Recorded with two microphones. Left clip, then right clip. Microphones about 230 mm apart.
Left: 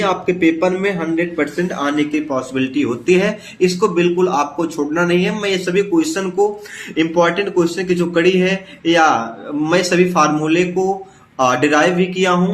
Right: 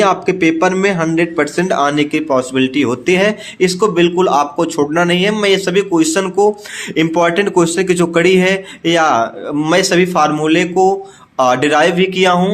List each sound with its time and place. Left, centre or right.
0.0 s a man's voice: right